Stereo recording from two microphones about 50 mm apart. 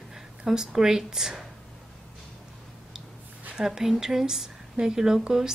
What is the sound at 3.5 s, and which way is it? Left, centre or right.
A woman's voice, centre.